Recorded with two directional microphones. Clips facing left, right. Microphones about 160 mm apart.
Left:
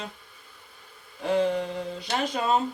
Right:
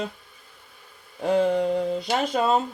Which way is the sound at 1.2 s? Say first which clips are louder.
Right 4 dB; 40° right (ahead or behind).